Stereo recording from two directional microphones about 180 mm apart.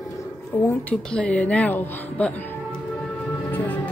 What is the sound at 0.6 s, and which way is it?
Speech, 5° left (ahead or behind).